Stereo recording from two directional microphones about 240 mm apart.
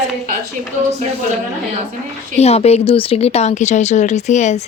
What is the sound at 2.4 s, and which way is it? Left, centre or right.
Speech, left.